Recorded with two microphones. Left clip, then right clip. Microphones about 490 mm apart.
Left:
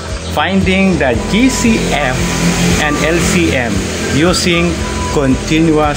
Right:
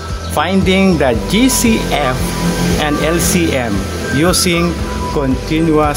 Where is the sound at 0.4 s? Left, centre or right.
Right.